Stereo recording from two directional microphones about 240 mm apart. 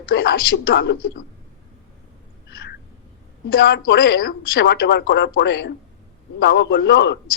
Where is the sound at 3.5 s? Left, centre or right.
Left.